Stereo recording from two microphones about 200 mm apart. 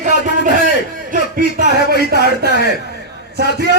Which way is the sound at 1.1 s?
50° right (ahead or behind).